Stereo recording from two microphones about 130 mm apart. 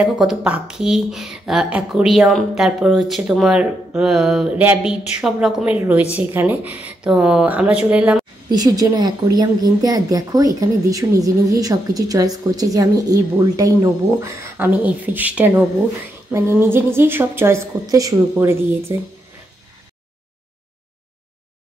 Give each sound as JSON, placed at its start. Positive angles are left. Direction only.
{"t": 0.0, "sound": "a woman's voice", "side_deg": -5}
{"t": 8.5, "sound": "a woman's voice", "side_deg": -30}